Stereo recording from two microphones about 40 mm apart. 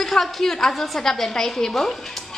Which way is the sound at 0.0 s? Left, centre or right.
Centre.